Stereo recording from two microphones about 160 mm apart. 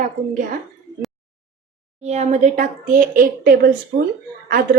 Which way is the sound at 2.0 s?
45° right (ahead or behind).